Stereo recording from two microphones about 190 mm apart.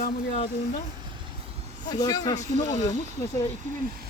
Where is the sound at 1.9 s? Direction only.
20° left (ahead or behind).